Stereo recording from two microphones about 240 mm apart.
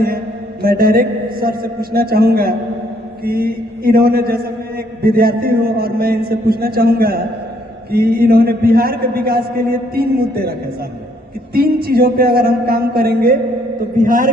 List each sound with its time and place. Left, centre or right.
0.6 s a man's voice: right
11.5 s a man's voice: right